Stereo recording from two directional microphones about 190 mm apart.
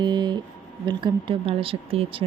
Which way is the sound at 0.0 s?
25° right (ahead or behind).